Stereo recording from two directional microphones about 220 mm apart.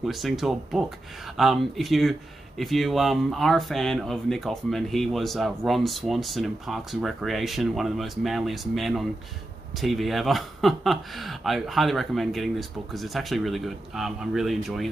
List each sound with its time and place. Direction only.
0.0 s speech: centre (ahead or behind)